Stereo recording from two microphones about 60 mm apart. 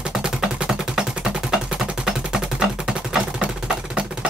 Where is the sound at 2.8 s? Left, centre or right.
Centre.